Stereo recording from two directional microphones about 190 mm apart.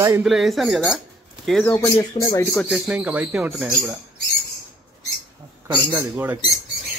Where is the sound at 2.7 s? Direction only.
5° right (ahead or behind).